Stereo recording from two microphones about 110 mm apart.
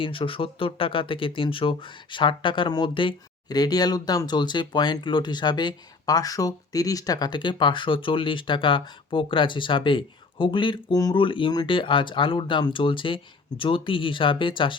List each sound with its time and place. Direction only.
0.0 s speech: 50° left (ahead or behind)
3.6 s speech: 35° left (ahead or behind)